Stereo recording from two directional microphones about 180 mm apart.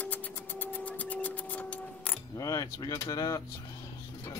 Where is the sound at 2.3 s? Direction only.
20° left (ahead or behind).